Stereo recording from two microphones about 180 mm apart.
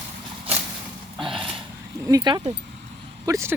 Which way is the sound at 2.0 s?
25° right (ahead or behind).